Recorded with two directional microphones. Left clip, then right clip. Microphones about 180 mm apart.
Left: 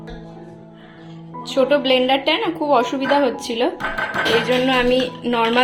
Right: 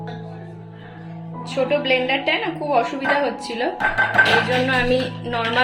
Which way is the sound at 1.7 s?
45° left (ahead or behind).